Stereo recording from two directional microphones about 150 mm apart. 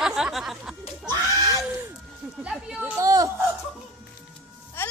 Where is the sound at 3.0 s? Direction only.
20° right (ahead or behind).